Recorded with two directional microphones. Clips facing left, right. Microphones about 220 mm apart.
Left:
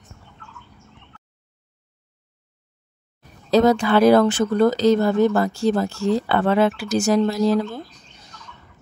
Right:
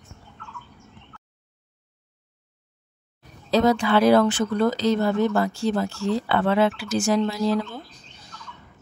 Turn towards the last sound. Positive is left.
turn(degrees=45)  # may be behind; listen again after turning